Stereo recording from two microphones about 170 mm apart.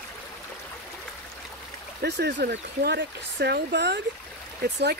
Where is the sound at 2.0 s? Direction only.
85° right.